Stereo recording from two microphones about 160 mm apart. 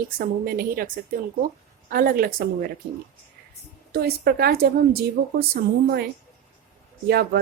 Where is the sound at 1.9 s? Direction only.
65° right (ahead or behind).